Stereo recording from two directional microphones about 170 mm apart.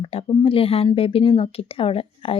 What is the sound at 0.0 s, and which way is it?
A woman's voice, 35° left (ahead or behind).